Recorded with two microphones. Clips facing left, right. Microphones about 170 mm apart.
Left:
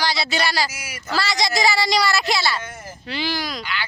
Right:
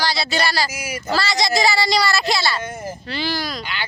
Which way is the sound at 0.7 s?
15° right (ahead or behind).